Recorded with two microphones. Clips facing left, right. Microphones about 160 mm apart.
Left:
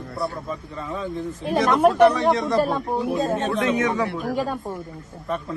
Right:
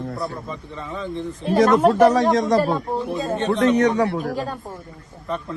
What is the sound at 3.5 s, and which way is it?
Speech, 35° right (ahead or behind).